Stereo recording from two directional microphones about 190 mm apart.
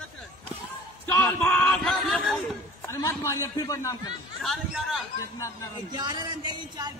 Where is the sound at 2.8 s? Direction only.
15° left (ahead or behind).